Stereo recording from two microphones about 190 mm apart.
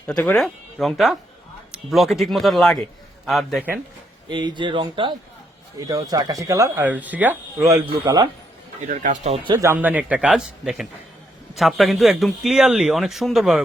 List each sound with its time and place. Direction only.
0.1 s speech: 5° left (ahead or behind)
4.3 s speech: 25° right (ahead or behind)
8.9 s speech: 40° right (ahead or behind)
9.4 s speech: 25° right (ahead or behind)
9.6 s speech: 10° right (ahead or behind)